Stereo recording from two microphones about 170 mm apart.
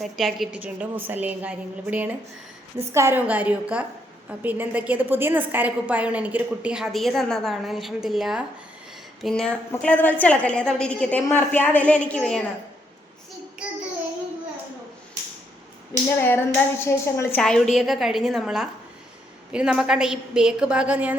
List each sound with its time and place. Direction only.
0.0 s a woman's voice: centre (ahead or behind)
15.9 s a woman's voice: 20° left (ahead or behind); by 21.2 s 10° right (ahead or behind)